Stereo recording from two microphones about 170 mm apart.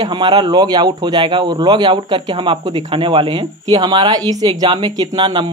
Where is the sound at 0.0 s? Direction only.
25° right (ahead or behind).